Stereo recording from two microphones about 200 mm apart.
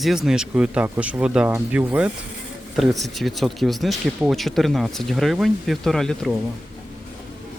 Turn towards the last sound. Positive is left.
turn(degrees=0)  # may be behind; listen again after turning